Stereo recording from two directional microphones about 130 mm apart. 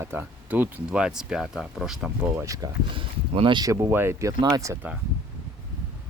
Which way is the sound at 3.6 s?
25° right (ahead or behind).